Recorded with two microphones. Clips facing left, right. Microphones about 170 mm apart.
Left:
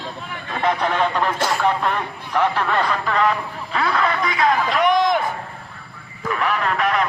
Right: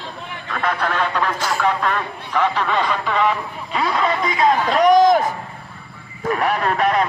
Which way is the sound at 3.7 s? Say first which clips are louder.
Right 1 dB; 15° right (ahead or behind).